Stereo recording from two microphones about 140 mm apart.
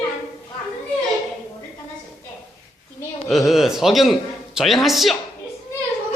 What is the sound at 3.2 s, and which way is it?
A man's voice, centre (ahead or behind).